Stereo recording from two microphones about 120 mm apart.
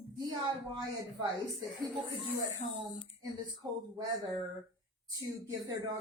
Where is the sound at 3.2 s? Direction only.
30° right (ahead or behind).